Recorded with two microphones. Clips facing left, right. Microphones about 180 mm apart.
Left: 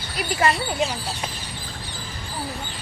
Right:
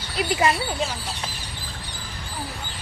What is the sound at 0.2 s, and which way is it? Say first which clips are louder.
Speech: right 2 dB; 20° right (ahead or behind).